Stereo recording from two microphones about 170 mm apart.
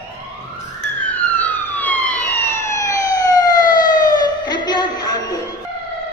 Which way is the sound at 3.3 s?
25° left (ahead or behind).